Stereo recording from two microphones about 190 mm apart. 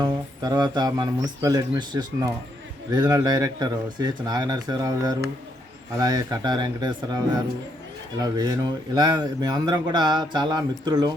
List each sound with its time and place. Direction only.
0.0 s speech: 20° right (ahead or behind)